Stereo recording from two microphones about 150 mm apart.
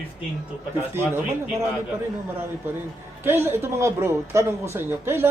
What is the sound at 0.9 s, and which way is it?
Speech, 15° right (ahead or behind).